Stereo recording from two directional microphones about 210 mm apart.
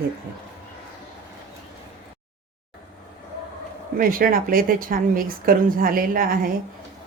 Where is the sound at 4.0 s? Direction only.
45° right (ahead or behind).